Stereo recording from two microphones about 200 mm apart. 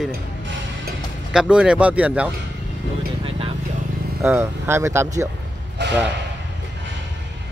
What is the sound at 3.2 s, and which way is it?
Vehicle, 25° right (ahead or behind).